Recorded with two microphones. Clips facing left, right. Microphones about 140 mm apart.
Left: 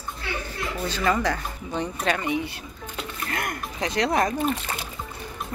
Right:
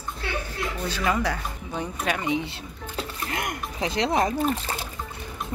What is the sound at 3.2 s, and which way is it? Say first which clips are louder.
Speech: left 2 dB; 20° right (ahead or behind).